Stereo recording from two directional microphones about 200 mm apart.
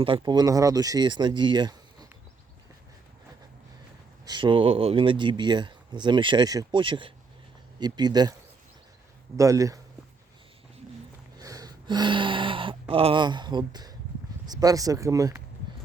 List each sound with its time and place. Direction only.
0.0 s speech: 25° right (ahead or behind)
4.3 s speech: 25° right (ahead or behind)
11.3 s gasp: 20° right (ahead or behind)
12.9 s speech: 30° right (ahead or behind)